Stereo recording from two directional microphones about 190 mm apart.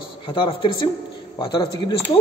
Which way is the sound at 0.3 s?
25° left (ahead or behind).